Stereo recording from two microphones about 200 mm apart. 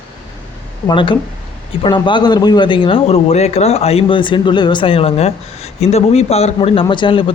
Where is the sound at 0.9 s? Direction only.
25° left (ahead or behind).